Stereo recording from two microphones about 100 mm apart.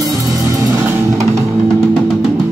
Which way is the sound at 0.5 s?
30° right (ahead or behind).